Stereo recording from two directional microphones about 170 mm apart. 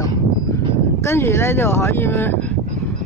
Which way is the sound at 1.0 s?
15° left (ahead or behind).